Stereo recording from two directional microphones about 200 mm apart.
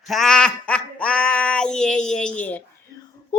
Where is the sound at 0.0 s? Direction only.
Centre (ahead or behind).